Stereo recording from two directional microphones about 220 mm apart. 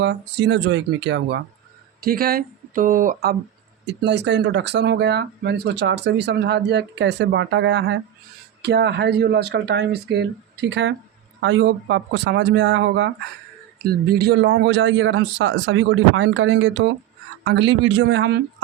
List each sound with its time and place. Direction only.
0.0 s speech: 55° right (ahead or behind)
3.8 s speech: 50° right (ahead or behind)